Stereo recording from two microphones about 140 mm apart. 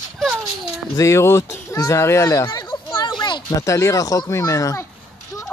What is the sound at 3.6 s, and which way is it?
Speech, 20° left (ahead or behind).